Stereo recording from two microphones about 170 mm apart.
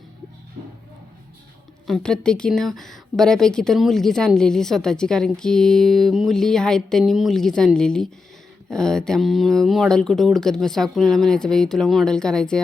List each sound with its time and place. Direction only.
1.9 s speech: 5° left (ahead or behind)